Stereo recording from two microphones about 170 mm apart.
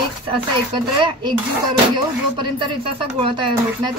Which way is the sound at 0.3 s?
30° right (ahead or behind).